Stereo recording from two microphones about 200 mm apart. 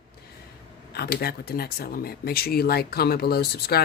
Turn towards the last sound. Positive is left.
turn(degrees=50)  # may be behind; listen again after turning